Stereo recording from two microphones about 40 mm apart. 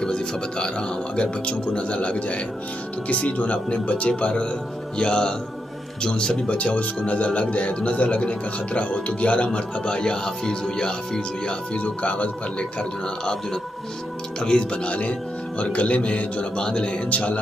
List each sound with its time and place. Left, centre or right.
0.0 s speech: left
11.8 s speech: left
13.2 s speech: centre
17.1 s speech: left